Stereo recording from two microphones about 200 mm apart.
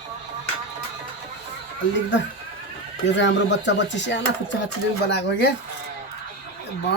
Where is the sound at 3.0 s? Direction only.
65° left (ahead or behind).